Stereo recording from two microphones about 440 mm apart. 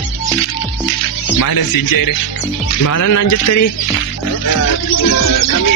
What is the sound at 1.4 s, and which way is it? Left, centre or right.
Speech, left.